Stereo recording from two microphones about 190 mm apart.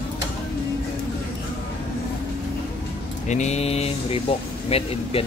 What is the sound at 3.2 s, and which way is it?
Speech, 40° left (ahead or behind).